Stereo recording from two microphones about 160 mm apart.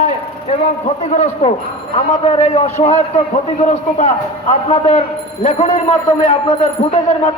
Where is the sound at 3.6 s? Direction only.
50° left (ahead or behind).